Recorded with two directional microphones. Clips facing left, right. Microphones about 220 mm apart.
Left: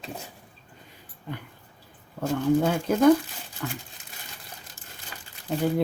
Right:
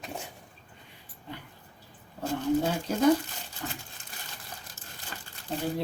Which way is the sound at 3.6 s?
70° left (ahead or behind).